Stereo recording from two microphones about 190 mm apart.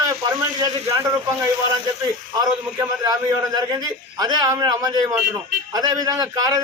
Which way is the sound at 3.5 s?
20° right (ahead or behind).